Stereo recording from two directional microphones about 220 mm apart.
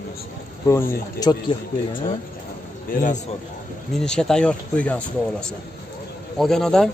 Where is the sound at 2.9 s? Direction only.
40° left (ahead or behind).